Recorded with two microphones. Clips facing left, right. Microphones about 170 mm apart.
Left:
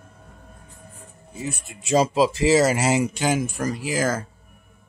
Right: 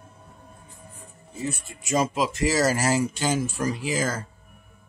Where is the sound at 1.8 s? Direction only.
30° left (ahead or behind).